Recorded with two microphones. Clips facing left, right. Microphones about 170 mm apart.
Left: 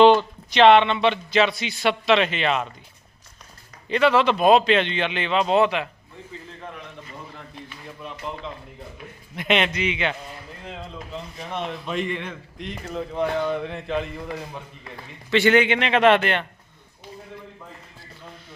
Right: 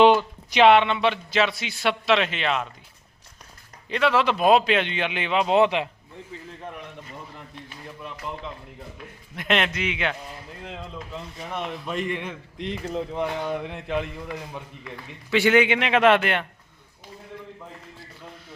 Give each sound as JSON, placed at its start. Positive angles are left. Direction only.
{"t": 0.0, "sound": "speech", "side_deg": -10}
{"t": 3.8, "sound": "speech", "side_deg": 0}
{"t": 9.3, "sound": "speech", "side_deg": 0}
{"t": 11.5, "sound": "speech", "side_deg": -5}
{"t": 12.5, "sound": "speech", "side_deg": -30}
{"t": 13.1, "sound": "speech", "side_deg": -10}
{"t": 15.3, "sound": "speech", "side_deg": -5}